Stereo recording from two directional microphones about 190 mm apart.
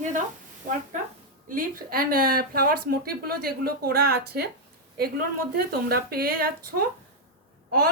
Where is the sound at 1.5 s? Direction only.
50° right (ahead or behind).